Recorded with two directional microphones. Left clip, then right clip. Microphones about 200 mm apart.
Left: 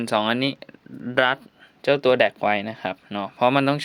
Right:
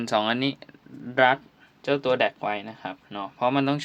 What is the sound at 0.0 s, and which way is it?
Speech, 25° left (ahead or behind).